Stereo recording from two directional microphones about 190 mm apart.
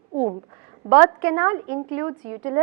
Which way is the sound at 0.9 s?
15° right (ahead or behind).